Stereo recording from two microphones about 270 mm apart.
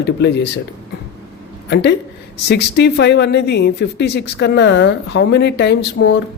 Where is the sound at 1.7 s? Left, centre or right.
Left.